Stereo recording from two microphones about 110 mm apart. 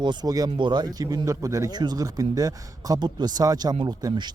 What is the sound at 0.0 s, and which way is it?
Speech, 40° right (ahead or behind).